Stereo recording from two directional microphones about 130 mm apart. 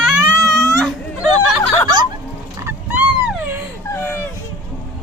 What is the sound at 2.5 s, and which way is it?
Dog, 20° right (ahead or behind).